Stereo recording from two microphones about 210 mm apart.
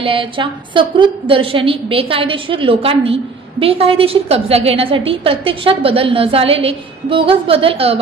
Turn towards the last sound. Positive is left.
turn(degrees=-25)  # may be behind; listen again after turning